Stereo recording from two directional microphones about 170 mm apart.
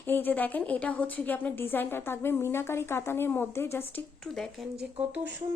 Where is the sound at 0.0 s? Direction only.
10° left (ahead or behind).